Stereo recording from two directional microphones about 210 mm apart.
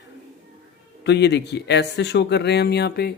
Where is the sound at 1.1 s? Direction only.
55° left (ahead or behind).